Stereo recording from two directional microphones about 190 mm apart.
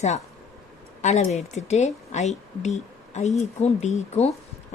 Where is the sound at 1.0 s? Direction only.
35° left (ahead or behind).